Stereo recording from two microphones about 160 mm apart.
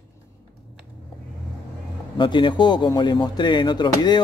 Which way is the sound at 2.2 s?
30° left (ahead or behind).